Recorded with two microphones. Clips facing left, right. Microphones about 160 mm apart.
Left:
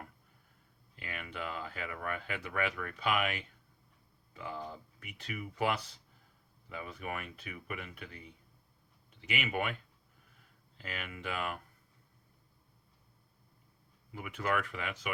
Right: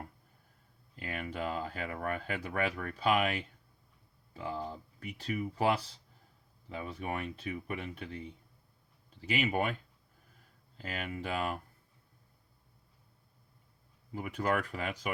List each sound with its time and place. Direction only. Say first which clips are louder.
0.9 s speech: right 5 dB; 40° right (ahead or behind)
9.2 s speech: right 4 dB; 35° right (ahead or behind)
14.1 s speech: right 2 dB; 40° right (ahead or behind)